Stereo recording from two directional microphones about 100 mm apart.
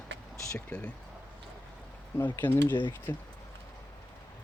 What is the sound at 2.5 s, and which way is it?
Speech, 25° left (ahead or behind).